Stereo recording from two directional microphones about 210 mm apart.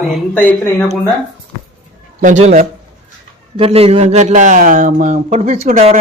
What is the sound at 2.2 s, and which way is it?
A man's voice, 35° right (ahead or behind).